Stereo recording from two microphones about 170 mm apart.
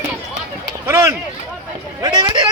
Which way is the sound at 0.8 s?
15° right (ahead or behind).